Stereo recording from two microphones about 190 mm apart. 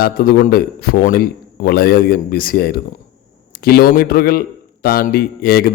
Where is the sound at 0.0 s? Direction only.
50° left (ahead or behind).